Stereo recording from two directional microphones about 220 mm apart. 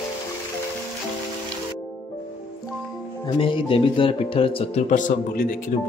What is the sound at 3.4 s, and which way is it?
Speech, 25° left (ahead or behind).